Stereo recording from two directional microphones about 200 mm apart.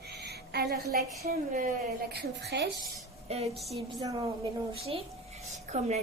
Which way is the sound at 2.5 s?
55° right (ahead or behind).